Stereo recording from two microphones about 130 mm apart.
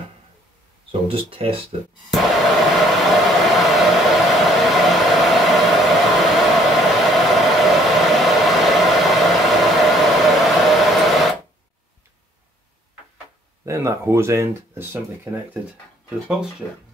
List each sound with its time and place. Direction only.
1.0 s speech: 45° right (ahead or behind)
2.1 s hair dryer: centre (ahead or behind)
13.7 s speech: 20° right (ahead or behind)